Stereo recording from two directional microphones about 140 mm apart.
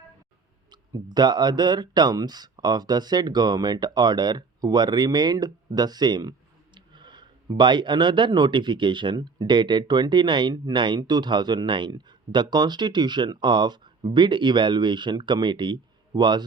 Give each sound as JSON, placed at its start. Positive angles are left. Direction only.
{"t": 0.7, "sound": "speech", "side_deg": -30}